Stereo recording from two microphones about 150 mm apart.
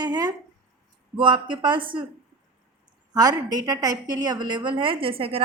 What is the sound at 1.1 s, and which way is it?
Speech, 30° right (ahead or behind).